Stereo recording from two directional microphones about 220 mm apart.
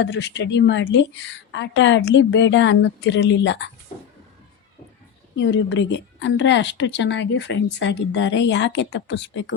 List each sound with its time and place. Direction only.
0.0 s speech: 50° left (ahead or behind)
5.4 s a woman's voice: 55° left (ahead or behind)